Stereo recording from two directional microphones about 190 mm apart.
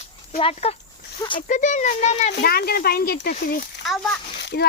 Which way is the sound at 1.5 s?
40° left (ahead or behind).